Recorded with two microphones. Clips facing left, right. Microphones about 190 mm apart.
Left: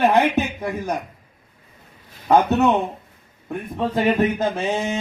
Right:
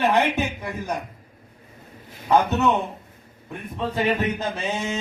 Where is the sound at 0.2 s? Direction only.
55° left (ahead or behind).